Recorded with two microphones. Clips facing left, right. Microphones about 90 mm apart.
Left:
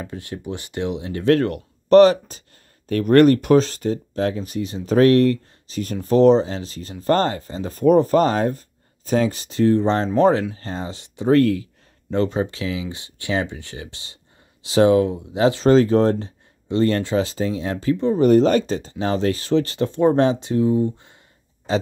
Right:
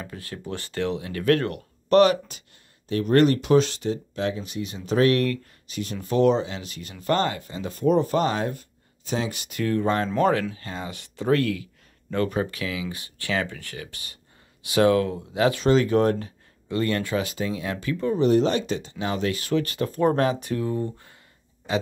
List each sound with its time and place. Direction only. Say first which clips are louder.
0.0 s speech: left 5 dB; 25° left (ahead or behind)
2.9 s speech: left 6 dB; 55° left (ahead or behind); by 11.3 s 25° left (ahead or behind)
11.3 s speech: left 11 dB; 35° left (ahead or behind)
15.6 s speech: left 6 dB; 35° left (ahead or behind)
18.2 s speech: left 6 dB; 45° left (ahead or behind); by 21.2 s 20° left (ahead or behind)
21.7 s speech: left 4 dB; 30° left (ahead or behind)